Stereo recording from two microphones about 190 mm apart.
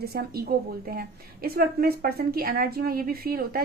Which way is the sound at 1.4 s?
55° right (ahead or behind).